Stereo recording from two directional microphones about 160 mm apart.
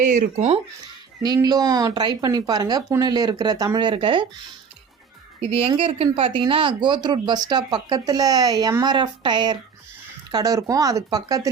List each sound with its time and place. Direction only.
0.0 s speech: 50° right (ahead or behind)
1.2 s speech: 25° right (ahead or behind)
5.5 s speech: 35° right (ahead or behind)